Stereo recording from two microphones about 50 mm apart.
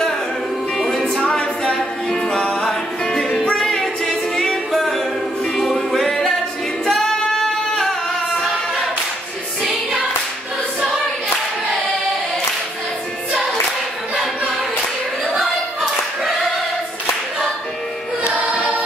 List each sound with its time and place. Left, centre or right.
0.7 s music: centre
1.2 s a capella: centre
2.6 s music: centre
6.9 s singing: centre